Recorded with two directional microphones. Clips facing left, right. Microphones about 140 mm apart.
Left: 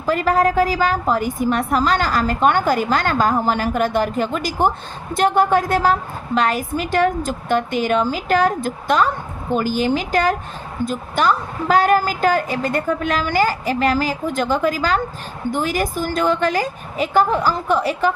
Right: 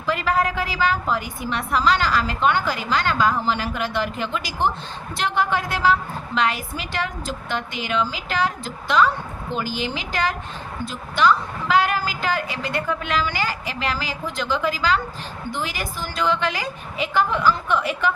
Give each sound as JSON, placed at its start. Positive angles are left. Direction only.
{"t": 0.0, "sound": "a woman's voice", "side_deg": 45}